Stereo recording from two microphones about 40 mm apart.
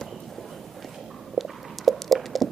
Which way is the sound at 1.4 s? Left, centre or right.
Centre.